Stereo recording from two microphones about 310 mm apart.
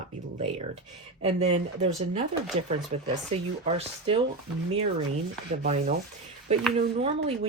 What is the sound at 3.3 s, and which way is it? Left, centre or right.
Speech, centre.